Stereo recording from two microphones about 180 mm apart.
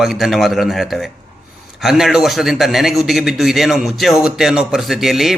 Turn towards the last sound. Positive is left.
turn(degrees=0)  # may be behind; listen again after turning